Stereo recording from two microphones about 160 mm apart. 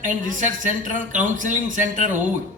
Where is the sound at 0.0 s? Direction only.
55° right (ahead or behind).